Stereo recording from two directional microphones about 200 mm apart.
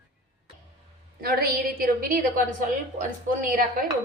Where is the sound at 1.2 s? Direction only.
45° right (ahead or behind).